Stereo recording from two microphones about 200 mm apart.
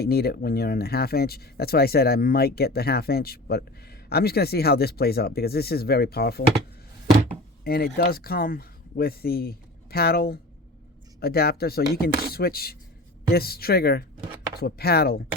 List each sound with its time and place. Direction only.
0.0 s speech: 50° left (ahead or behind)
7.6 s speech: 50° left (ahead or behind)